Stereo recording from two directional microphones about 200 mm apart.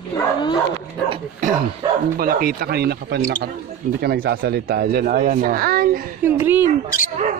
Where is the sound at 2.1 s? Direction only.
45° right (ahead or behind).